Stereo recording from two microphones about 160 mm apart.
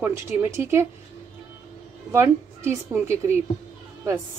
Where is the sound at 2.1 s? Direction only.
15° right (ahead or behind).